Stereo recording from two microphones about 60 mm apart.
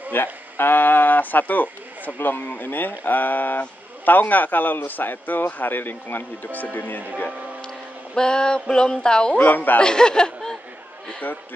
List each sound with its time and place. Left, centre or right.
0.1 s speech: left
7.2 s speech: centre
9.4 s speech: left
9.8 s speech: centre